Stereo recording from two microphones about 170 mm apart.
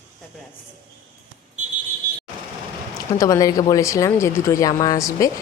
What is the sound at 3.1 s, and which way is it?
Speech, 20° left (ahead or behind).